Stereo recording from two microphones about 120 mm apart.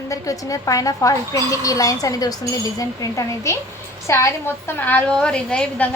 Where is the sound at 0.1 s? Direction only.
25° left (ahead or behind).